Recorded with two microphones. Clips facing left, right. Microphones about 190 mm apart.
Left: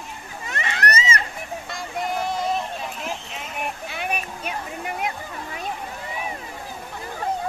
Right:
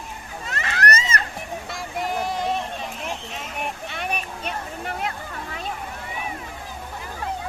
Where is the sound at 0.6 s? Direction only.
25° left (ahead or behind).